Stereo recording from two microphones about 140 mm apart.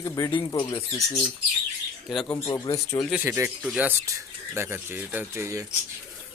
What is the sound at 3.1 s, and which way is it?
Speech, 15° right (ahead or behind).